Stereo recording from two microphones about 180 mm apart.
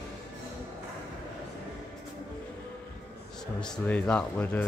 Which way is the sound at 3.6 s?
5° left (ahead or behind).